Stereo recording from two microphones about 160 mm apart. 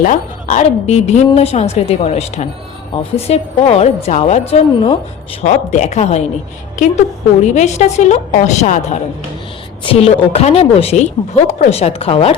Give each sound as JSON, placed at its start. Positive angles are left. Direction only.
{"t": 0.0, "sound": "a woman's voice", "side_deg": 55}
{"t": 9.8, "sound": "a woman's voice", "side_deg": 35}